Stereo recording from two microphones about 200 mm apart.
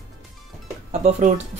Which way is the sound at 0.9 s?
35° right (ahead or behind).